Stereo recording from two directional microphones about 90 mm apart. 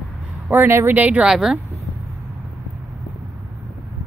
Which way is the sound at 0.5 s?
25° right (ahead or behind).